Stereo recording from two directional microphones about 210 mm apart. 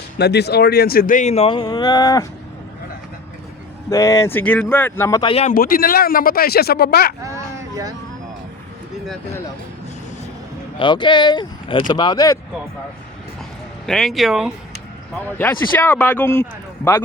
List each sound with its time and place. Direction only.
0.2 s speech: 50° left (ahead or behind); by 2.2 s 20° left (ahead or behind)
3.8 s speech: 15° left (ahead or behind)
5.3 s speech: 30° left (ahead or behind)
5.5 s a man's voice: 45° left (ahead or behind)
7.2 s a sound: 15° right (ahead or behind)
10.8 s speech: 20° left (ahead or behind)
13.8 s speech: centre (ahead or behind)
15.4 s speech: 10° left (ahead or behind)